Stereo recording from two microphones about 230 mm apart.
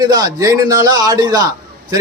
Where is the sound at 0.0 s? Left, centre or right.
Centre.